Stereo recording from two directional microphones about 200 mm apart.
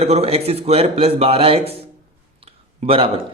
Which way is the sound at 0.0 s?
30° right (ahead or behind).